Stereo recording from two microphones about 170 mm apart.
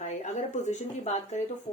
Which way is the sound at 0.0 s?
45° left (ahead or behind).